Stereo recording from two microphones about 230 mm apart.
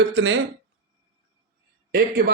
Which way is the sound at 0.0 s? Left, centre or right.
Right.